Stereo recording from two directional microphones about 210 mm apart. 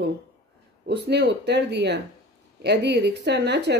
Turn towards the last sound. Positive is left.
turn(degrees=-55)  # may be behind; listen again after turning